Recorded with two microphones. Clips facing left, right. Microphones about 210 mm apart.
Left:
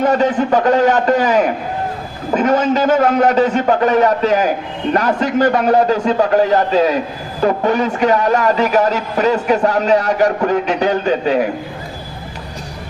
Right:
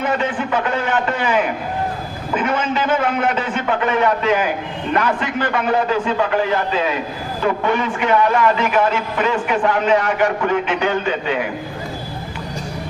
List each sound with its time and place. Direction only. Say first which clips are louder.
0.0 s a man's voice: left 7 dB; 40° left (ahead or behind)